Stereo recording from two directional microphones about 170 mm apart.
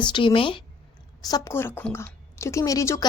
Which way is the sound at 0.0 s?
30° left (ahead or behind).